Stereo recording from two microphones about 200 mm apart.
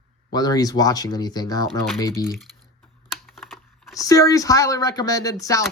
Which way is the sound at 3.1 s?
Centre (ahead or behind).